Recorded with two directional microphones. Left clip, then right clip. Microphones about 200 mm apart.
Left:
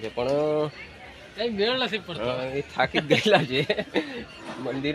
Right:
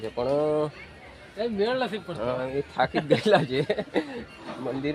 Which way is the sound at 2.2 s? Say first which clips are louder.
Right 2 dB; 10° left (ahead or behind).